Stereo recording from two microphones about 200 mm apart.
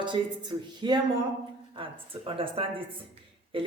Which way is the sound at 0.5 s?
20° right (ahead or behind).